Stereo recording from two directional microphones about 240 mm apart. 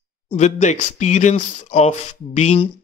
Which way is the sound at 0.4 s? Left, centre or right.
Left.